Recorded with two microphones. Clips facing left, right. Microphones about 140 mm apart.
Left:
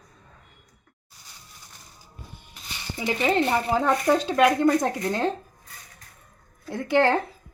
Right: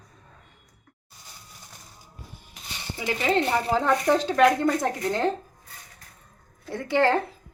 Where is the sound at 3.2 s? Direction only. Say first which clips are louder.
Left 1 dB; 15° left (ahead or behind).